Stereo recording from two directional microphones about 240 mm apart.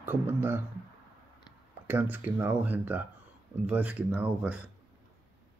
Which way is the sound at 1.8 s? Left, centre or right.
Centre.